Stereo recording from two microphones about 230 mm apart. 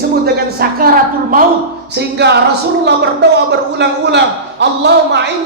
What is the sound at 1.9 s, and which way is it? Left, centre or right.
A man's voice, right.